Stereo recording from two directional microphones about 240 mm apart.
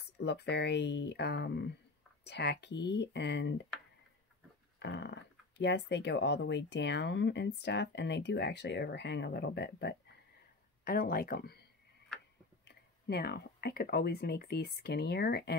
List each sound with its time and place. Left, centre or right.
0.2 s speech: left
4.7 s speech: left
12.6 s speech: left